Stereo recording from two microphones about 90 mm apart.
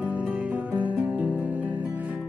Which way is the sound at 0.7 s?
15° right (ahead or behind).